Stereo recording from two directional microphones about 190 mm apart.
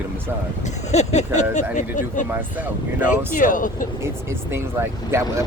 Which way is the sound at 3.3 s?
45° left (ahead or behind).